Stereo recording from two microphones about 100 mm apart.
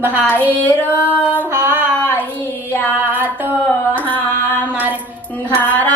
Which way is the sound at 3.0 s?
20° right (ahead or behind).